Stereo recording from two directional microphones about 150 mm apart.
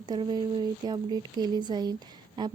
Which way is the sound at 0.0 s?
30° right (ahead or behind).